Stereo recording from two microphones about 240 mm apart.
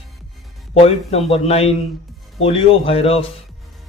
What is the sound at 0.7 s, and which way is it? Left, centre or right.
A man's voice, left.